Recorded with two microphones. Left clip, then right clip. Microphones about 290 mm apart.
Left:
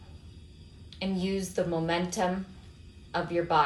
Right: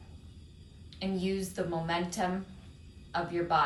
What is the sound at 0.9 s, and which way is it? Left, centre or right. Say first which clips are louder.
Speech: left 2 dB; centre.